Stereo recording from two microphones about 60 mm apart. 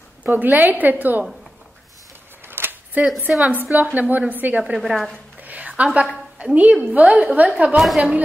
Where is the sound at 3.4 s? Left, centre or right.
Right.